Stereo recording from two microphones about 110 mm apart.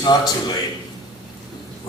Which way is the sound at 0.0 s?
40° left (ahead or behind).